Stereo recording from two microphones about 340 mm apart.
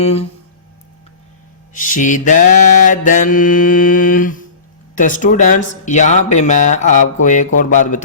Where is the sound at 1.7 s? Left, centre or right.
Left.